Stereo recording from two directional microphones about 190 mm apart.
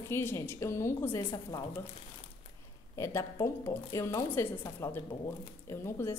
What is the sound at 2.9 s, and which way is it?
A woman's voice, 15° left (ahead or behind).